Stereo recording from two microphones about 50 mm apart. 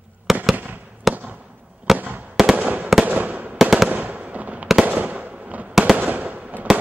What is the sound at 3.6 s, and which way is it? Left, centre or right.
Fireworks, centre.